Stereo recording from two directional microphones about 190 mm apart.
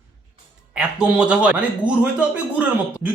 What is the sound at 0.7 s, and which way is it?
A man's voice, 5° right (ahead or behind).